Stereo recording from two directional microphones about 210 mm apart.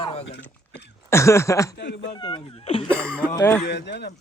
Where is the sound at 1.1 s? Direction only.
15° left (ahead or behind).